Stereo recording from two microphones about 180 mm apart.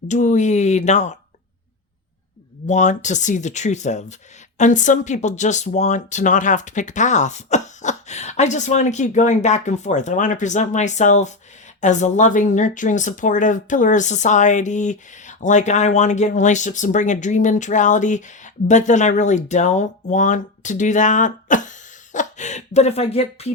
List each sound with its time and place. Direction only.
0.1 s speech: 40° left (ahead or behind)
2.6 s speech: 40° left (ahead or behind)